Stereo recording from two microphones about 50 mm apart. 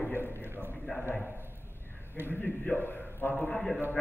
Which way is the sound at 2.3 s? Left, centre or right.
Left.